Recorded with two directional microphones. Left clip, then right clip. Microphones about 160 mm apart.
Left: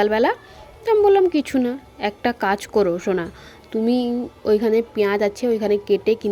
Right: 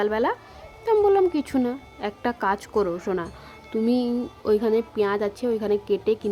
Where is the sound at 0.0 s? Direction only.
15° left (ahead or behind).